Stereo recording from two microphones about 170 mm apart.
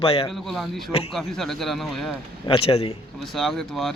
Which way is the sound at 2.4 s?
35° left (ahead or behind).